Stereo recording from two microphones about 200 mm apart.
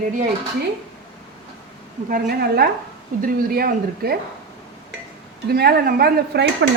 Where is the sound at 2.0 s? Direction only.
50° right (ahead or behind).